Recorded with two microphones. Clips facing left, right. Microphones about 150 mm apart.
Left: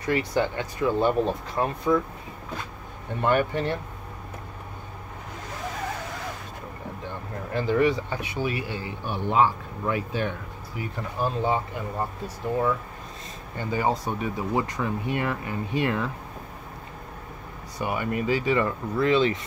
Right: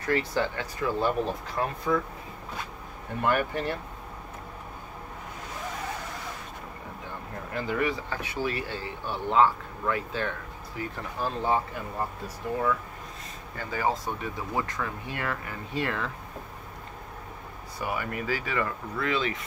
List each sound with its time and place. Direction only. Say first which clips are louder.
0.0 s speech: left 2 dB; 15° left (ahead or behind)
3.2 s speech: left 3 dB; 25° left (ahead or behind)
7.5 s speech: left 6 dB; 30° left (ahead or behind)
8.2 s speech: left 2 dB; 15° left (ahead or behind)
13.6 s speech: left 3 dB; 20° left (ahead or behind)
17.7 s speech: left 4 dB; 25° left (ahead or behind)